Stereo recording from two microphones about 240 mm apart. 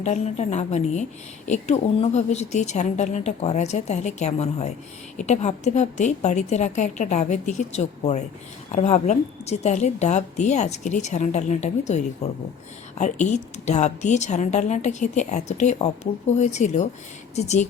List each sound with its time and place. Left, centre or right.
0.0 s a woman's voice: left